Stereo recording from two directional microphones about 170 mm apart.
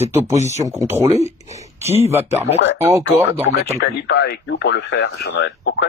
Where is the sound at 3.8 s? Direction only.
90° left.